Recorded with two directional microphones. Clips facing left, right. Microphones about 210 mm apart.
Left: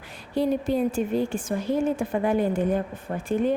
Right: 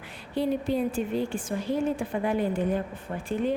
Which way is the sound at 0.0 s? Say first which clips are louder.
Left 3 dB; 40° left (ahead or behind).